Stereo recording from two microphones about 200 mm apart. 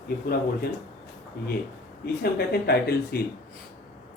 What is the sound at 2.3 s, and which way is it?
Speech, 50° left (ahead or behind).